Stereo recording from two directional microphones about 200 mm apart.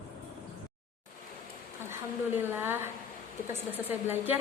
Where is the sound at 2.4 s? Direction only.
10° right (ahead or behind).